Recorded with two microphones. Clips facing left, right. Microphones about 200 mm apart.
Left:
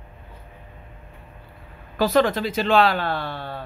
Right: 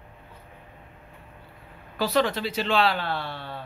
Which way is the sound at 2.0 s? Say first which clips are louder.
Left 5 dB; 50° left (ahead or behind).